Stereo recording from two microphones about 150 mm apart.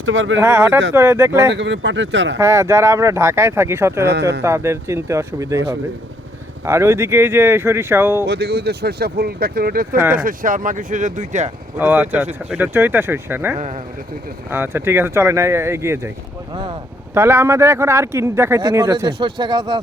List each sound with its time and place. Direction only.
0.3 s speech: 15° right (ahead or behind)
6.7 s speech: 20° right (ahead or behind)
8.3 s speech: 90° right
9.9 s speech: 10° right (ahead or behind)
10.2 s speech: 65° right (ahead or behind)
11.8 s speech: 10° right (ahead or behind)
13.6 s speech: 50° right (ahead or behind)
14.5 s speech: 15° right (ahead or behind)
17.2 s speech: 15° right (ahead or behind); by 19.8 s 30° right (ahead or behind)